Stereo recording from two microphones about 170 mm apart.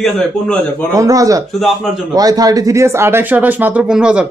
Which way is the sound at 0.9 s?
20° right (ahead or behind).